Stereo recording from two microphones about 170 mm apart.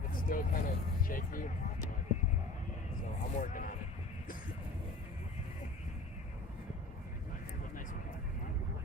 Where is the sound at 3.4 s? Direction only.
50° left (ahead or behind).